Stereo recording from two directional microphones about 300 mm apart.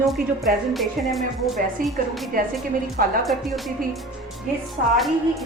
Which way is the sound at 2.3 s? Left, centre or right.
Right.